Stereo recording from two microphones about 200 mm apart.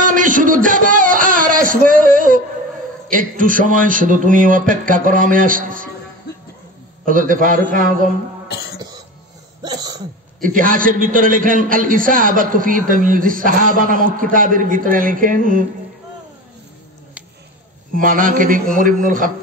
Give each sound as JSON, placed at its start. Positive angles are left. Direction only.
{"t": 0.0, "sound": "a sound", "side_deg": -40}
{"t": 3.1, "sound": "a man's voice", "side_deg": -40}
{"t": 7.1, "sound": "a man's voice", "side_deg": -45}
{"t": 8.5, "sound": "cough", "side_deg": 55}
{"t": 9.6, "sound": "cough", "side_deg": -20}
{"t": 10.4, "sound": "a man's voice", "side_deg": -45}
{"t": 17.9, "sound": "a man's voice", "side_deg": -45}